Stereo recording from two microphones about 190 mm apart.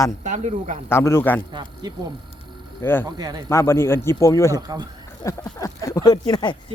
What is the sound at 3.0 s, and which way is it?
Speech, 20° right (ahead or behind).